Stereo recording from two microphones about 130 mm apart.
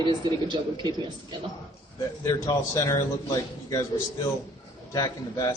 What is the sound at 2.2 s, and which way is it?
A man's voice, 30° left (ahead or behind).